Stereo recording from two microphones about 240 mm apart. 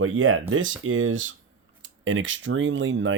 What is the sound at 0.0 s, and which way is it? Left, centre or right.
Speech, right.